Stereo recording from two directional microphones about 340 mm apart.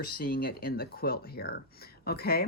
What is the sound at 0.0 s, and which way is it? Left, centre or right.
Speech, left.